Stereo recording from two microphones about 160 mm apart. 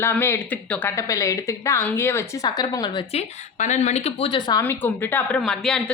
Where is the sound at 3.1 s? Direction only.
45° left (ahead or behind); by 4.6 s 25° left (ahead or behind).